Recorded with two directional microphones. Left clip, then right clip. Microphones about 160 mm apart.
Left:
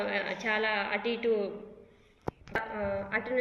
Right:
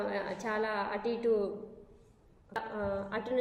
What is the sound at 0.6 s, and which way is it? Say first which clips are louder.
Speech: left 3 dB; 25° right (ahead or behind).